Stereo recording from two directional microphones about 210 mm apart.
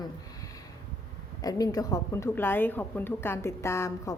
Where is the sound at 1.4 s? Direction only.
15° left (ahead or behind).